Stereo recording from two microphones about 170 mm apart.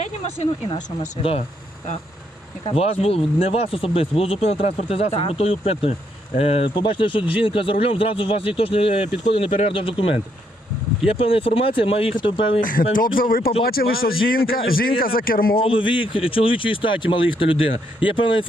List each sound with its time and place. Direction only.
0.0 s speech: 40° left (ahead or behind)
2.6 s speech: 35° left (ahead or behind)
12.9 s speech: 55° left (ahead or behind)
15.5 s speech: 30° left (ahead or behind)